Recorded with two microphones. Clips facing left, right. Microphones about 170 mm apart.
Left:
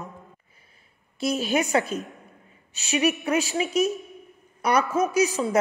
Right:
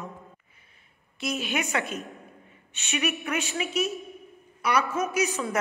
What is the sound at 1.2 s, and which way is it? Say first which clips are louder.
A woman's voice: left 6 dB; 35° left (ahead or behind).